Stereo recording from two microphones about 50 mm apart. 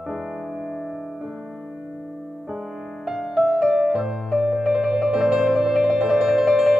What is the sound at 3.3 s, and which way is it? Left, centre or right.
Music, centre.